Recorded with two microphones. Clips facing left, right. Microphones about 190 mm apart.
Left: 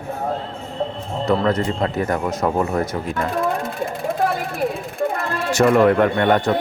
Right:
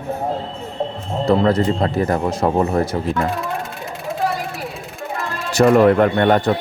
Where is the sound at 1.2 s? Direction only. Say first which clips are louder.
Right 3 dB; 30° right (ahead or behind).